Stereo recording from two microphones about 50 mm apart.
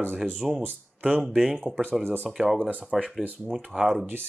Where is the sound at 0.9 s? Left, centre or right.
Right.